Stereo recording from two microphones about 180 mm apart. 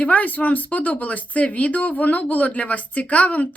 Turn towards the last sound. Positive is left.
turn(degrees=10)  # may be behind; listen again after turning